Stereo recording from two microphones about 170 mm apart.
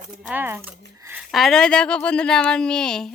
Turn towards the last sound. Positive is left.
turn(degrees=5)  # may be behind; listen again after turning